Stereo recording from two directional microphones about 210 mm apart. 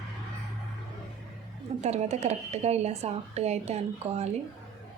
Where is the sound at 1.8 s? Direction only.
30° right (ahead or behind).